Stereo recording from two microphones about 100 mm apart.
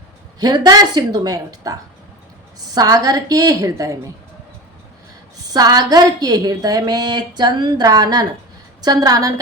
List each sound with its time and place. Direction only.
0.3 s a woman's voice: 45° right (ahead or behind)
2.7 s a woman's voice: 40° right (ahead or behind)
5.5 s a woman's voice: 40° right (ahead or behind)